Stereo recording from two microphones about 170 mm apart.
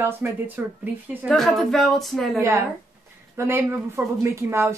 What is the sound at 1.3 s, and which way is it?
A woman's voice, centre (ahead or behind).